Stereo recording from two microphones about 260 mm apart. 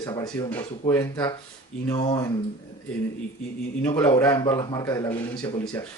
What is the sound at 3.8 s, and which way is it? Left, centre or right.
Speech, centre.